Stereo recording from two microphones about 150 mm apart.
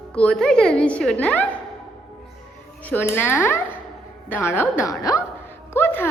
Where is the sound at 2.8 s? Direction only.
15° left (ahead or behind).